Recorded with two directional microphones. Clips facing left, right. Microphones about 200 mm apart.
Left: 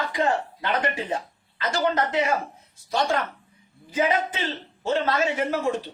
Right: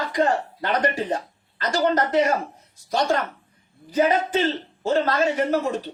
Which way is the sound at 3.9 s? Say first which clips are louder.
Right 4 dB; 45° right (ahead or behind).